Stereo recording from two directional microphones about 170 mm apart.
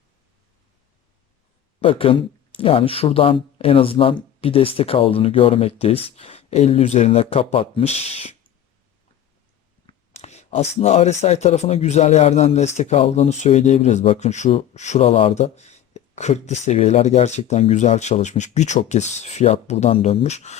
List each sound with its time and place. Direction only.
1.8 s speech: 30° left (ahead or behind)
10.1 s speech: 40° left (ahead or behind)